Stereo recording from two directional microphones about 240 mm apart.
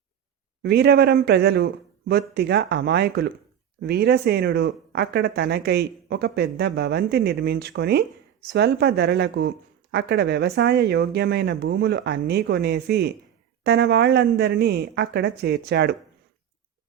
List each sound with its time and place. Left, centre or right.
0.6 s speech: right